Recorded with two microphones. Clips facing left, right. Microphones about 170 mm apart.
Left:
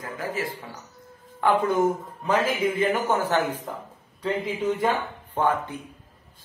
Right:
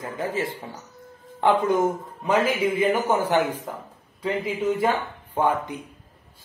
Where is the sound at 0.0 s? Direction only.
25° right (ahead or behind).